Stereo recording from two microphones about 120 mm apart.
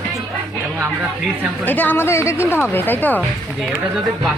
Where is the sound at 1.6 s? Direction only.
15° left (ahead or behind).